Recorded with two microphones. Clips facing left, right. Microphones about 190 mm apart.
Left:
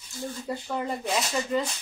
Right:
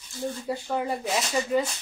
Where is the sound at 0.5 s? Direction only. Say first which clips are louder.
Right 1 dB; 10° right (ahead or behind).